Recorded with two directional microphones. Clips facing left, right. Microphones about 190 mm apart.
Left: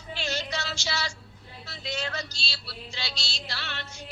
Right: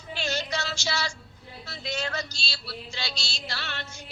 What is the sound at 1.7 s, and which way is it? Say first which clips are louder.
Music: right 2 dB; 45° right (ahead or behind).